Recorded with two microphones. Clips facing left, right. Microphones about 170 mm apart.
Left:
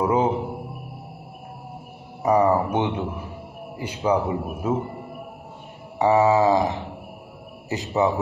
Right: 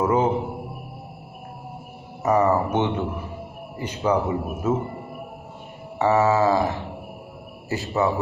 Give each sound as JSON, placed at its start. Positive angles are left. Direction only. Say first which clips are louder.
{"t": 0.0, "sound": "music", "louder": "even", "side_deg": 10}
{"t": 2.2, "sound": "a sound", "louder": "left 1 dB", "side_deg": 10}
{"t": 3.7, "sound": "a man's voice", "louder": "even", "side_deg": 10}
{"t": 5.9, "sound": "a man's voice", "louder": "left 1 dB", "side_deg": 15}